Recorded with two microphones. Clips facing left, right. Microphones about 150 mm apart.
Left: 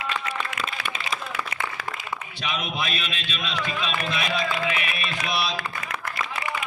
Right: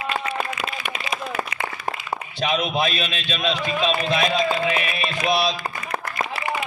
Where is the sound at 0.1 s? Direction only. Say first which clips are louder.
Right 6 dB; 40° right (ahead or behind).